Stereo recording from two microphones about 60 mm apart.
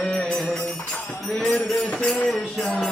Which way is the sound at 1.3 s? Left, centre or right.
Centre.